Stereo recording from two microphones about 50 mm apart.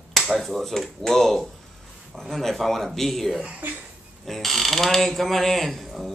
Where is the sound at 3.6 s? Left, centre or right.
Right.